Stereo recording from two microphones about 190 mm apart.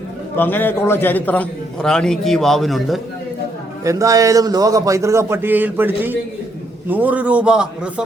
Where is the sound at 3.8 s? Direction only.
15° right (ahead or behind).